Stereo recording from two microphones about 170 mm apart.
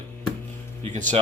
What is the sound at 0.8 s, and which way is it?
Speech, 45° right (ahead or behind).